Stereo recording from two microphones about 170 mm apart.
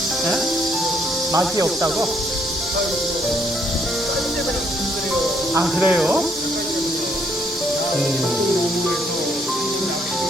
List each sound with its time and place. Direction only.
1.3 s speech: 20° right (ahead or behind)
5.5 s speech: 5° right (ahead or behind)